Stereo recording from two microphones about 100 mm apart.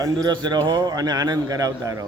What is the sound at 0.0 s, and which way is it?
A man's voice, 40° right (ahead or behind).